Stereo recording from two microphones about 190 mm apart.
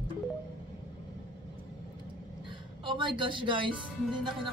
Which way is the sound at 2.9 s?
25° right (ahead or behind).